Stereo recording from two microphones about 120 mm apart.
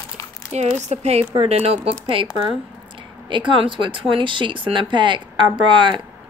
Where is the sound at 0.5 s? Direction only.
65° right (ahead or behind).